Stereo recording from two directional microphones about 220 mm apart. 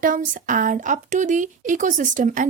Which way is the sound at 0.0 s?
40° right (ahead or behind).